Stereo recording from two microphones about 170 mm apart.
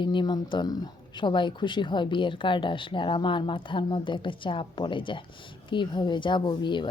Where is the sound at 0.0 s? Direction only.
30° left (ahead or behind).